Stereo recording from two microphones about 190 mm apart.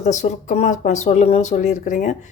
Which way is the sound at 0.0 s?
40° left (ahead or behind).